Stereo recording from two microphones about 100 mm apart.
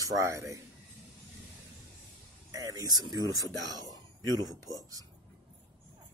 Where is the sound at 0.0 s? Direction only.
35° right (ahead or behind).